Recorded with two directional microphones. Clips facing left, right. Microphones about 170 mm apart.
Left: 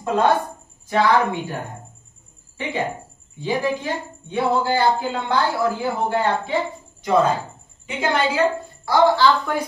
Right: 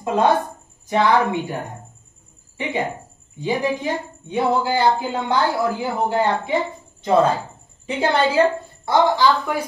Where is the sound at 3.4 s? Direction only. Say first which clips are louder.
Right 1 dB; 20° right (ahead or behind).